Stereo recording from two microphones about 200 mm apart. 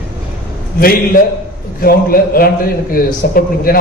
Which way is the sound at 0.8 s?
50° left (ahead or behind).